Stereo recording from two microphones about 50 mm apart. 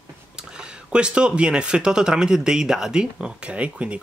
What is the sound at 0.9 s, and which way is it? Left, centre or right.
Speech, centre.